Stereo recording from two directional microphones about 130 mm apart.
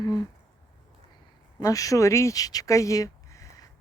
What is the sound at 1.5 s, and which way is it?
Speech, 25° left (ahead or behind).